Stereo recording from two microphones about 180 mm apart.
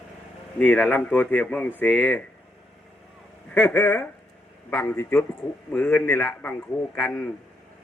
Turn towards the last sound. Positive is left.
turn(degrees=10)  # may be behind; listen again after turning